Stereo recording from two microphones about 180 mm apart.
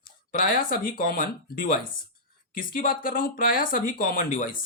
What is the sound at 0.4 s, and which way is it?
Speech, 50° left (ahead or behind).